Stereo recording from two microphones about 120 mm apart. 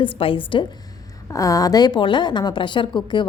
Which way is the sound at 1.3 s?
30° left (ahead or behind).